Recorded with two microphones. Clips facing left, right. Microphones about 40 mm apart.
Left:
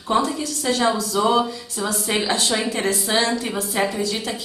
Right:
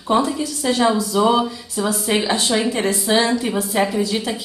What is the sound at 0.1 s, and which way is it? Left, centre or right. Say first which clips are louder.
A woman's voice: right 2 dB; centre.